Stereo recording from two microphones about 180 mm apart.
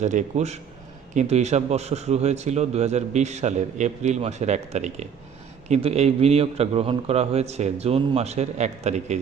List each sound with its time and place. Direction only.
0.0 s speech: 40° right (ahead or behind)